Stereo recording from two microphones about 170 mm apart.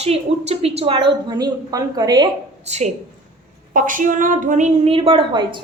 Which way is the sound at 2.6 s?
40° right (ahead or behind).